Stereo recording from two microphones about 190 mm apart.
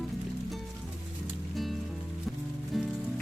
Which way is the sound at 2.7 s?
Centre (ahead or behind).